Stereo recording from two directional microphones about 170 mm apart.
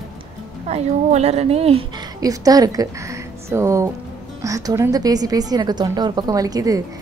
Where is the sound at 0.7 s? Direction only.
40° right (ahead or behind).